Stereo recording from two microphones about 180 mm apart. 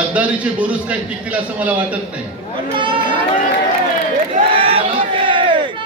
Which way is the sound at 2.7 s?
25° right (ahead or behind).